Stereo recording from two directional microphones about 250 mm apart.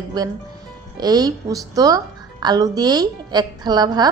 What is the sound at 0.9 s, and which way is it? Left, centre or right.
Speech, centre.